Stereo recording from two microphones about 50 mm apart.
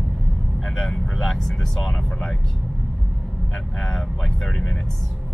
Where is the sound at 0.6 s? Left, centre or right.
Centre.